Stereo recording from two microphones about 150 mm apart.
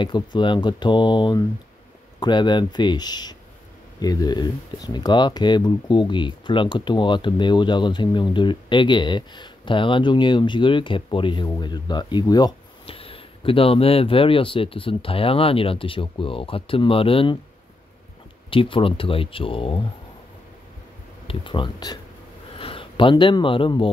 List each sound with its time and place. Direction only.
0.0 s speech: 30° left (ahead or behind)
18.5 s speech: 35° left (ahead or behind)
21.3 s speech: 35° left (ahead or behind)